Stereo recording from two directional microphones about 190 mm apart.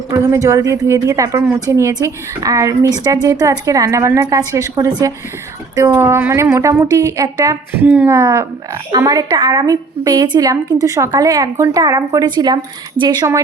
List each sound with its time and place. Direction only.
0.1 s a woman's voice: 15° right (ahead or behind)